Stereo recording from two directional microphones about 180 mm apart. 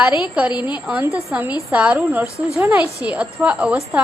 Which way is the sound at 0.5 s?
25° left (ahead or behind).